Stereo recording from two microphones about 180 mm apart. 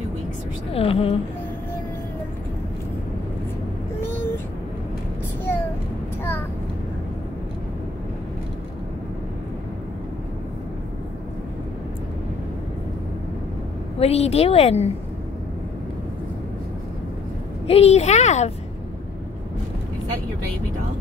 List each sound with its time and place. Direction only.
0.7 s speech: 30° left (ahead or behind)
13.9 s a woman's voice: 35° left (ahead or behind)
17.6 s speech: 35° left (ahead or behind)